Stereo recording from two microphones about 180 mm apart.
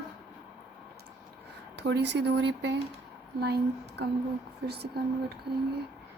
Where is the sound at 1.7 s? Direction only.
75° right (ahead or behind).